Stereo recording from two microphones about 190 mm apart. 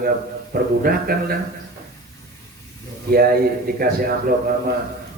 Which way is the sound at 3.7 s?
50° right (ahead or behind).